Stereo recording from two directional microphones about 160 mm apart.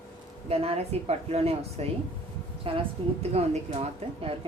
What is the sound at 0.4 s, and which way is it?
A woman's voice, 35° right (ahead or behind).